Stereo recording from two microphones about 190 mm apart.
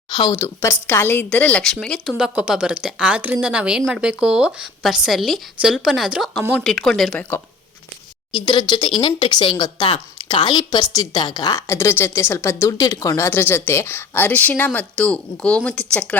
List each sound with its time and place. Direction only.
0.1 s speech: 25° left (ahead or behind)
0.3 s speech: 15° left (ahead or behind)
8.4 s speech: 25° left (ahead or behind); by 16.1 s 5° left (ahead or behind)